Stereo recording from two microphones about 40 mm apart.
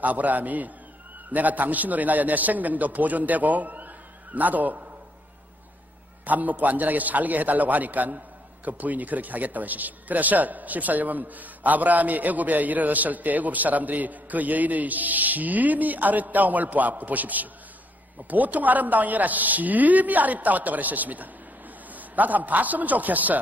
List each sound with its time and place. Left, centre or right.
0.0 s speech: right
6.2 s a man's voice: right